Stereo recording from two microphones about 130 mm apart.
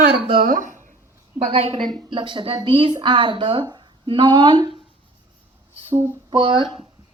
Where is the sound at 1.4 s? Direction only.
55° right (ahead or behind).